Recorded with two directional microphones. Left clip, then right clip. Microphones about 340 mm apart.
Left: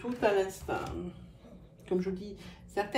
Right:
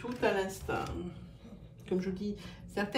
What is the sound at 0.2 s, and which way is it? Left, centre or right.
Speech, centre.